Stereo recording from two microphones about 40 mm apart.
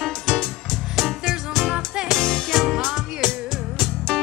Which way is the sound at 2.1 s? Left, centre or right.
Centre.